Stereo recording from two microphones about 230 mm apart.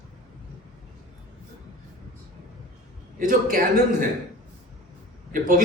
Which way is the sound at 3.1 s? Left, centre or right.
Right.